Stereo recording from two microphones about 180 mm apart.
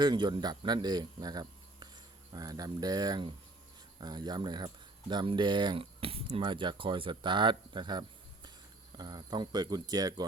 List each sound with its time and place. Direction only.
0.0 s speech: 25° right (ahead or behind)